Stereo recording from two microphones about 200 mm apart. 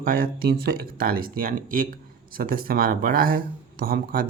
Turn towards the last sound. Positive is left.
turn(degrees=-45)  # may be behind; listen again after turning